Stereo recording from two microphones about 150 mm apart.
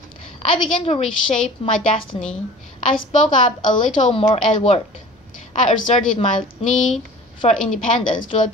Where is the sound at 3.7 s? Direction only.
40° left (ahead or behind).